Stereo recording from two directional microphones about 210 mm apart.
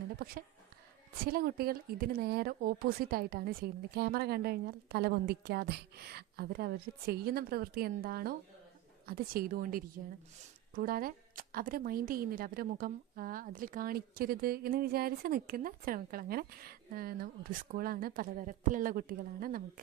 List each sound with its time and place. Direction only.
1.2 s a woman's voice: 45° right (ahead or behind)